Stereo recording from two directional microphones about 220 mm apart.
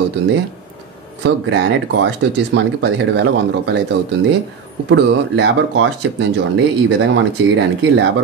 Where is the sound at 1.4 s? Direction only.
55° right (ahead or behind).